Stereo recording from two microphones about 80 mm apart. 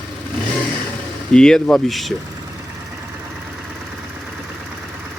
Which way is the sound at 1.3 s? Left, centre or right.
Centre.